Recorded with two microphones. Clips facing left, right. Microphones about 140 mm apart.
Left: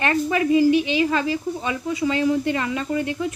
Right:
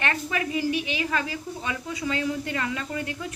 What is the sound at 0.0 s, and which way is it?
Speech, 30° left (ahead or behind).